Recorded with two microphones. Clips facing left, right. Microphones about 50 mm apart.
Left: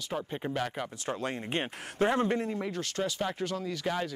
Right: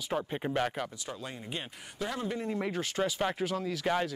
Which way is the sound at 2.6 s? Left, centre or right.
Centre.